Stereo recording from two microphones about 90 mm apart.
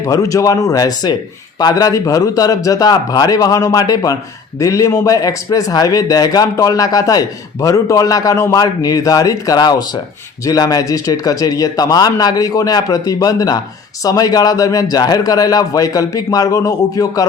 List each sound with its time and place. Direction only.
0.0 s a man's voice: 40° left (ahead or behind)